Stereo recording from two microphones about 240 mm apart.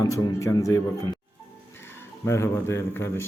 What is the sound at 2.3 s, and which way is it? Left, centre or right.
Speech, centre.